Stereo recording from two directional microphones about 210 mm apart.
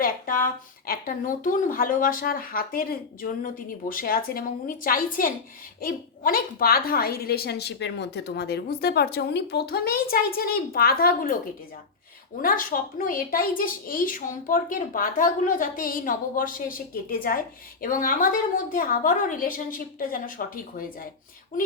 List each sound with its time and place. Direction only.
0.0 s a woman's voice: 40° left (ahead or behind)
12.4 s a woman's voice: 40° left (ahead or behind)